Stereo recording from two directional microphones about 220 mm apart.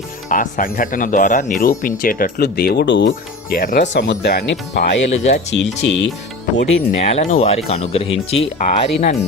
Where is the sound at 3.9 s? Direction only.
50° left (ahead or behind).